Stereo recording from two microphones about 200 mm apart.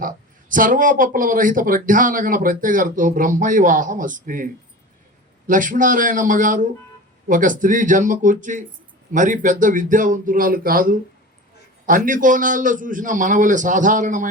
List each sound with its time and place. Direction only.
0.0 s speech: 45° right (ahead or behind)